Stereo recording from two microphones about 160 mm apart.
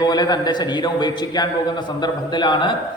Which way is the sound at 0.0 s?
25° left (ahead or behind).